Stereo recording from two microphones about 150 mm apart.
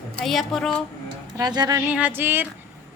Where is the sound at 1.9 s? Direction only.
10° right (ahead or behind).